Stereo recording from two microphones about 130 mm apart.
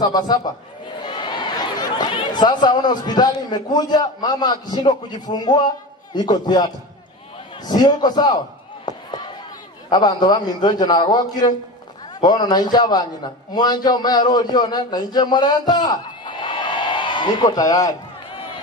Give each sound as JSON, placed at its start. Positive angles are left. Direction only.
{"t": 0.0, "sound": "a man's voice", "side_deg": 30}
{"t": 8.9, "sound": "a sound", "side_deg": 35}
{"t": 9.8, "sound": "a man's voice", "side_deg": 35}